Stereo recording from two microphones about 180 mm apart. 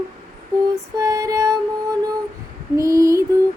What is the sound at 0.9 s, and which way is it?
Music, 20° right (ahead or behind).